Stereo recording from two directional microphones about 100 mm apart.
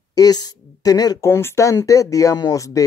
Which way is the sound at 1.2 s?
25° left (ahead or behind).